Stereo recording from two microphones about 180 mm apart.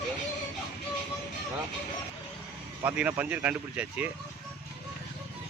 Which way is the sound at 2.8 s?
10° right (ahead or behind).